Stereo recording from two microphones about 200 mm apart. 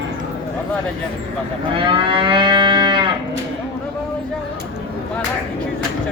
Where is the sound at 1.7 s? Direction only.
25° right (ahead or behind).